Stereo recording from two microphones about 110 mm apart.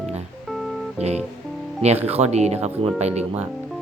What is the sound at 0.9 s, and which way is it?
Music, 80° right.